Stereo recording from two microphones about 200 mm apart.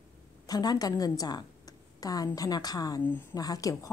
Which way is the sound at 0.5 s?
20° left (ahead or behind).